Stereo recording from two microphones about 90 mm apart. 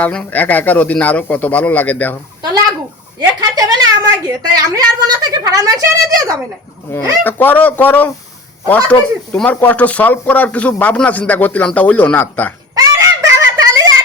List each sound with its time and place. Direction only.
0.0 s a man's voice: 15° left (ahead or behind)
3.2 s a woman's voice: 45° right (ahead or behind)
7.3 s a man's voice: 20° left (ahead or behind)
12.7 s a sound: 40° right (ahead or behind)